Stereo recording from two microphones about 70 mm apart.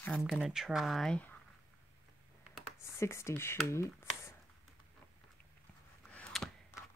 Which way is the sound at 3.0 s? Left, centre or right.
Left.